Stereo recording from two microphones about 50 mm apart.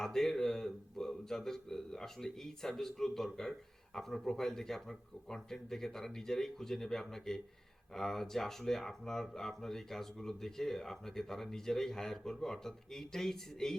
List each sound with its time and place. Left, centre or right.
0.0 s a man's voice: centre